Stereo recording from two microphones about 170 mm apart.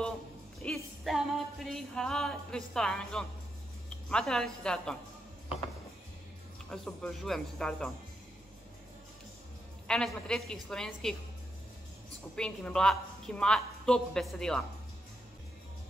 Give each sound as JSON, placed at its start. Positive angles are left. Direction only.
{"t": 0.7, "sound": "music", "side_deg": 0}
{"t": 4.1, "sound": "a woman's voice", "side_deg": 5}
{"t": 6.7, "sound": "a woman's voice", "side_deg": 0}
{"t": 9.8, "sound": "a woman's voice", "side_deg": 5}
{"t": 12.4, "sound": "a woman's voice", "side_deg": 5}